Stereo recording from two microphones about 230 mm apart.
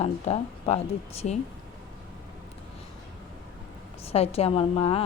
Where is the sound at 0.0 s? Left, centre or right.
Left.